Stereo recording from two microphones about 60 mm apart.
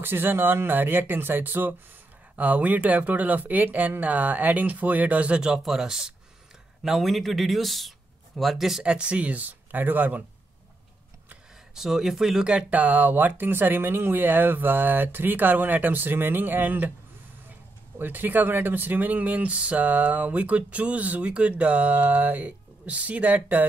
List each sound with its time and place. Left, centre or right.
0.0 s speech: right; by 8.9 s centre
8.9 s speech: right
11.7 s speech: centre; by 16.9 s right
17.9 s speech: right